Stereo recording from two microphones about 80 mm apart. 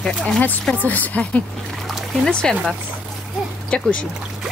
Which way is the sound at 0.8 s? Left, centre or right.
Left.